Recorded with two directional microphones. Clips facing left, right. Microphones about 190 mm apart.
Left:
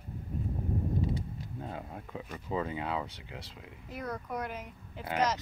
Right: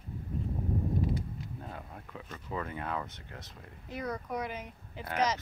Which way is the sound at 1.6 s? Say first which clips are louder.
Left 4 dB; 20° left (ahead or behind).